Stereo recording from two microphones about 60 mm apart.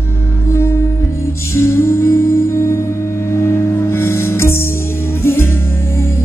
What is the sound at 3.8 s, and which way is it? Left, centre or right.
Music, left.